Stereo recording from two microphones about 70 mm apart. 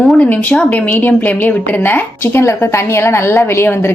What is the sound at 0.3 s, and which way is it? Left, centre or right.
A woman's voice, left.